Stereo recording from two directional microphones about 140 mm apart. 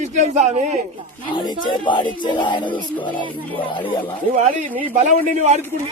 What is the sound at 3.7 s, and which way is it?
Speech, 35° left (ahead or behind).